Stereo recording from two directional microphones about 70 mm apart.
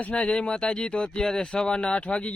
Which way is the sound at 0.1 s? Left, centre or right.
Centre.